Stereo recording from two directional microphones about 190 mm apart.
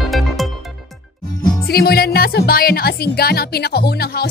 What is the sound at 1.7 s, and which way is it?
Speech, 55° left (ahead or behind).